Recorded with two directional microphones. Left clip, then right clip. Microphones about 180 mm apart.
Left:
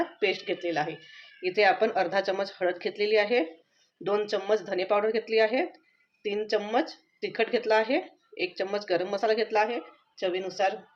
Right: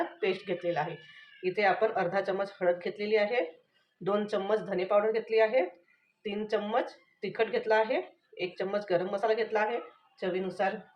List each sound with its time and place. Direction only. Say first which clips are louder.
0.2 s speech: left 3 dB; 50° left (ahead or behind)